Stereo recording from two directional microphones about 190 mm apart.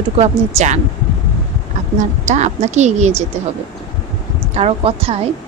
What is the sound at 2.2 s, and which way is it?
Speech, 40° right (ahead or behind).